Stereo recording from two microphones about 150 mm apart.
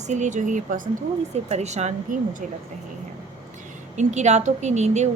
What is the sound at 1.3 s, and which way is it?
Speech, 45° right (ahead or behind).